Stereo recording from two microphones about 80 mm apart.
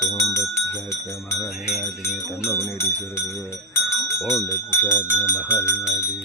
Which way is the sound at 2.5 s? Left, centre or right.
Left.